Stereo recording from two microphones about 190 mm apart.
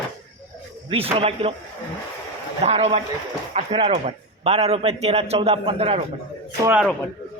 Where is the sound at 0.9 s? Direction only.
30° right (ahead or behind).